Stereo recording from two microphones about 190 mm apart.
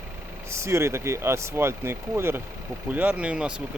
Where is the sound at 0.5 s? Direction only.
15° right (ahead or behind).